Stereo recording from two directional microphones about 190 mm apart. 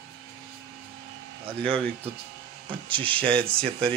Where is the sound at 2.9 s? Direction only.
25° right (ahead or behind).